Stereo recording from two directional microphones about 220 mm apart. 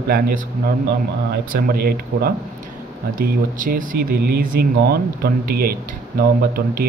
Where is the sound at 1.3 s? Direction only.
45° right (ahead or behind).